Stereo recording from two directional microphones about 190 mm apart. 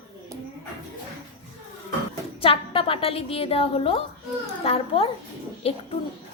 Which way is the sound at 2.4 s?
30° left (ahead or behind).